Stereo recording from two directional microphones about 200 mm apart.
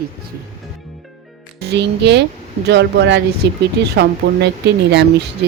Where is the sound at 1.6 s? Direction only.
55° right (ahead or behind).